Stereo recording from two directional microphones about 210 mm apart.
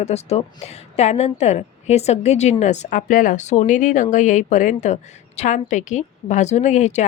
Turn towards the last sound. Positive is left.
turn(degrees=35)  # may be behind; listen again after turning